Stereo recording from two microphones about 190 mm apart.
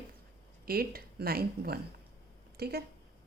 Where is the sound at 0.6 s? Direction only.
50° right (ahead or behind).